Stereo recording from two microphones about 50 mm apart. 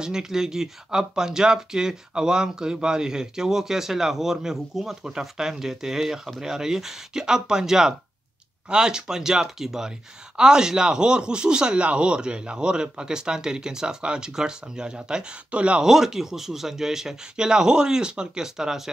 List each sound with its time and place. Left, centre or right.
0.0 s speech: centre
15.8 s speech: centre